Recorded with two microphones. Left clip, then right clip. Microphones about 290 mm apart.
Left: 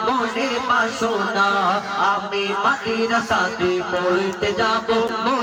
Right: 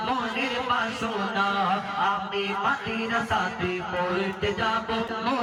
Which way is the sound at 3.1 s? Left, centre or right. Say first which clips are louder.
Left 4 dB; centre.